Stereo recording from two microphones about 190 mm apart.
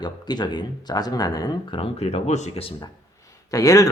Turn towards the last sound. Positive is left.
turn(degrees=20)  # may be behind; listen again after turning